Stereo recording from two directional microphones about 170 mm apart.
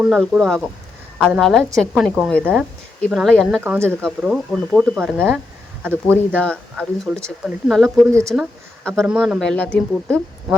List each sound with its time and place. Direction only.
0.0 s speech: 5° right (ahead or behind)
3.6 s speech: 10° right (ahead or behind)
5.8 s speech: 10° right (ahead or behind)
6.3 s speech: 5° left (ahead or behind)
8.1 s speech: 20° right (ahead or behind)
8.4 s speech: centre (ahead or behind)